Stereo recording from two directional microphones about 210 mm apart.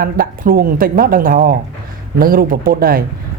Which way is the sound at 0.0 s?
45° right (ahead or behind).